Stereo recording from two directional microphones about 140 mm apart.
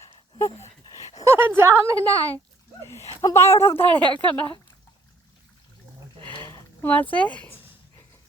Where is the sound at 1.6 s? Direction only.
20° right (ahead or behind).